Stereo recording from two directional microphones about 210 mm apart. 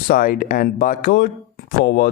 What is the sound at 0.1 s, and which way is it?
Speech, 40° left (ahead or behind).